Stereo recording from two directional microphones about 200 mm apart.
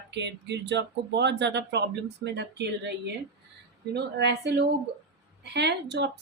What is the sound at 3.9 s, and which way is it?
Speech, 55° right (ahead or behind).